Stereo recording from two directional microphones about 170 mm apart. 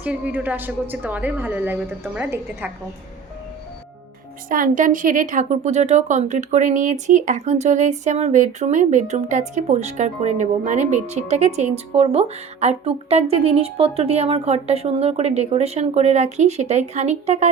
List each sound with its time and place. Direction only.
0.0 s a woman's voice: 10° right (ahead or behind)
4.4 s a woman's voice: 55° right (ahead or behind)